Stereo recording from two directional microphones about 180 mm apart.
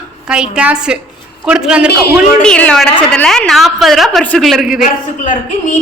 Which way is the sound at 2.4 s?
5° left (ahead or behind).